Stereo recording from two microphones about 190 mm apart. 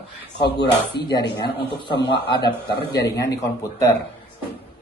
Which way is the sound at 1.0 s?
60° left (ahead or behind).